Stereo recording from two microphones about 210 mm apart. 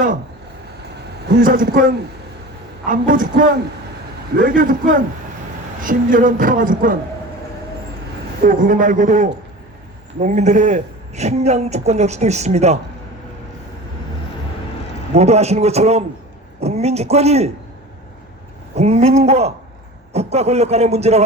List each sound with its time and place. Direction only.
1.4 s a woman's voice: 40° right (ahead or behind)
2.9 s a woman's voice: 40° right (ahead or behind)
8.4 s a woman's voice: 40° right (ahead or behind)
15.1 s a woman's voice: 30° right (ahead or behind)
18.7 s a woman's voice: 30° right (ahead or behind)